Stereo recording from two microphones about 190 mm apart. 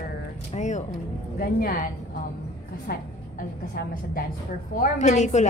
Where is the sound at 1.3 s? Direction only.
50° left (ahead or behind).